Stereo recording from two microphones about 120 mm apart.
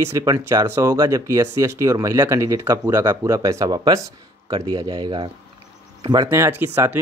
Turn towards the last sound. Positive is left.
turn(degrees=-20)  # may be behind; listen again after turning